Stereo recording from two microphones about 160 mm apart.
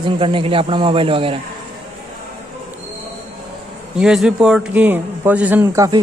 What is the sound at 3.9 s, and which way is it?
A man's voice, 5° right (ahead or behind).